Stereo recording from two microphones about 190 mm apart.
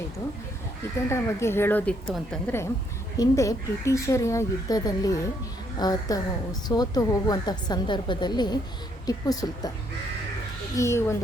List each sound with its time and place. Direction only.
1.1 s speech: 15° left (ahead or behind)
3.2 s a woman's voice: 15° left (ahead or behind)
10.8 s speech: 15° left (ahead or behind)